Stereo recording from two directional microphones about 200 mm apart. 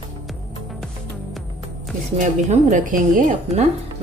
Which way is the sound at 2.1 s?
40° right (ahead or behind).